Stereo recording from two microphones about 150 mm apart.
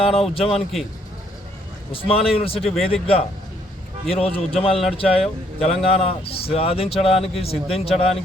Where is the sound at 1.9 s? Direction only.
40° left (ahead or behind).